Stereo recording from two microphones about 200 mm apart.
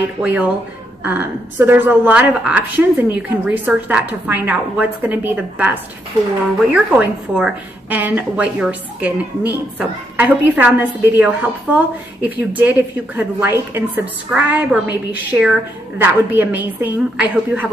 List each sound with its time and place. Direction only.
0.2 s a woman's voice: 10° right (ahead or behind)